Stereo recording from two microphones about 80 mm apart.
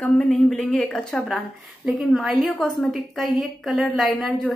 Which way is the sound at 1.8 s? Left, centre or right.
Centre.